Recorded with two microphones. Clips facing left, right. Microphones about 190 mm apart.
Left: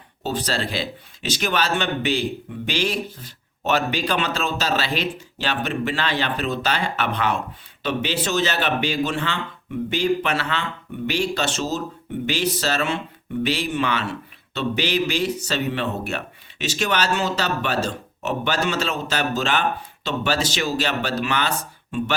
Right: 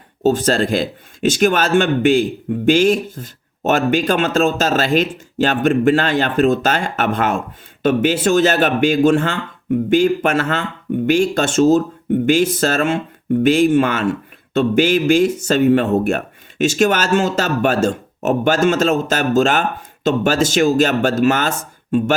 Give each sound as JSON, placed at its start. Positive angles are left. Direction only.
{"t": 0.2, "sound": "speech", "side_deg": -45}